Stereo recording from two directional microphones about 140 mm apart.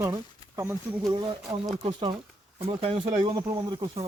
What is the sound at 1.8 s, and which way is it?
Speech, 40° right (ahead or behind).